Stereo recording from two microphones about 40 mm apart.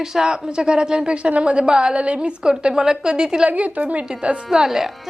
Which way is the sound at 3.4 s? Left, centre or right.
Right.